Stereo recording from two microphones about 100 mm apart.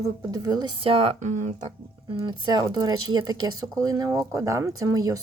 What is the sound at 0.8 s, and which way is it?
Speech, 70° right (ahead or behind).